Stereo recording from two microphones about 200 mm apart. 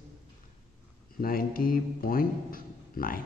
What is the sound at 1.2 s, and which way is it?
A man's voice, 45° left (ahead or behind).